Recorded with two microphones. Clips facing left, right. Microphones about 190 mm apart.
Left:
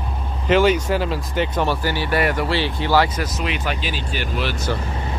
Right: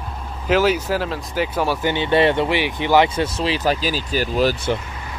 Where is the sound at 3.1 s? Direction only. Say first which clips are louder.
Right 4 dB; 30° right (ahead or behind).